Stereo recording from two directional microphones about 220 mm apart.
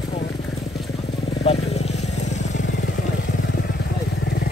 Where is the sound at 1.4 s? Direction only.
30° left (ahead or behind).